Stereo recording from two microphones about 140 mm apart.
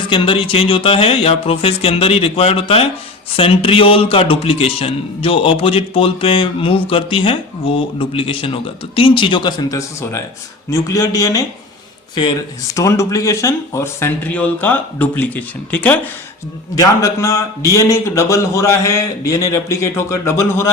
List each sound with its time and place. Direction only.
0.1 s a man's voice: 40° left (ahead or behind); by 16.0 s 10° left (ahead or behind)
16.7 s speech: 25° left (ahead or behind)